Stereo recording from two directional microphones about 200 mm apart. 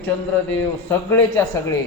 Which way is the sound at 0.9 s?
10° left (ahead or behind).